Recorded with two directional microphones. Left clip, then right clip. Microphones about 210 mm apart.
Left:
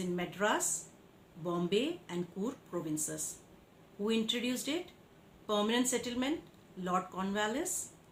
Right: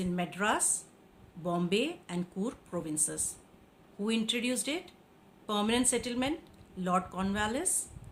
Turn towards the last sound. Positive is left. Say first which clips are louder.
# right 2 dB
turn(degrees=-55)  # may be behind; listen again after turning